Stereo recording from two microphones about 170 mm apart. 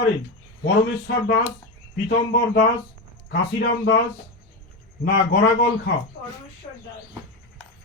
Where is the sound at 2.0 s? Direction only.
60° left (ahead or behind).